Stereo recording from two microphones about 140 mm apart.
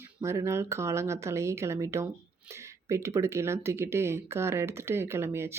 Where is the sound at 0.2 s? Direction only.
20° right (ahead or behind).